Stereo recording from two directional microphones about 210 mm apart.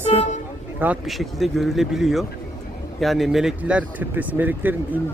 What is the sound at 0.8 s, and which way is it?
Speech, 5° right (ahead or behind).